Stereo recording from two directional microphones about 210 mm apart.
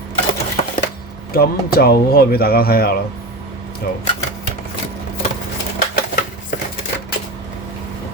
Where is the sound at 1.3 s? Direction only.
45° left (ahead or behind).